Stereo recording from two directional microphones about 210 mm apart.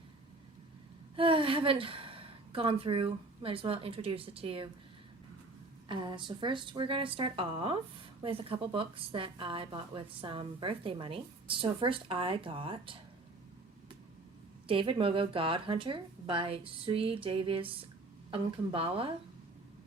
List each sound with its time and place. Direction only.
1.1 s a woman's voice: 25° right (ahead or behind)
5.9 s a woman's voice: 20° right (ahead or behind)
14.7 s a woman's voice: 25° right (ahead or behind)